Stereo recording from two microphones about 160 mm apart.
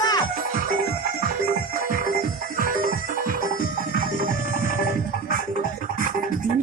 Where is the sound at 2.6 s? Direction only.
60° right (ahead or behind).